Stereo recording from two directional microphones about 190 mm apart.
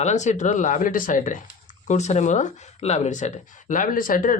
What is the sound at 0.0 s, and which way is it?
Speech, 40° left (ahead or behind).